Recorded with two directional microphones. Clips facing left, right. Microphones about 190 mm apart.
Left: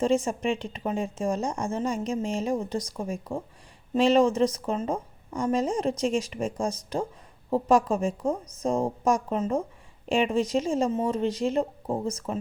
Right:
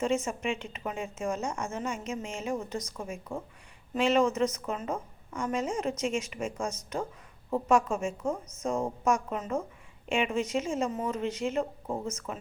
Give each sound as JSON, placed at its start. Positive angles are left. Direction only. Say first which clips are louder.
{"t": 0.0, "sound": "a woman's voice", "louder": "left 5 dB", "side_deg": 35}